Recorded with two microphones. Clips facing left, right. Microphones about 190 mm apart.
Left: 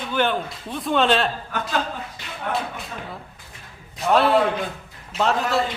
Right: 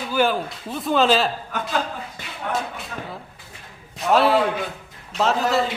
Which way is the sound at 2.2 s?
50° right (ahead or behind).